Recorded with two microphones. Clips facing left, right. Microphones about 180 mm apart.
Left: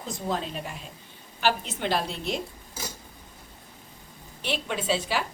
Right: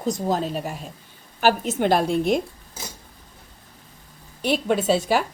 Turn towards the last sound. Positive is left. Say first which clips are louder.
# right 7 dB
turn(degrees=-45)  # may be behind; listen again after turning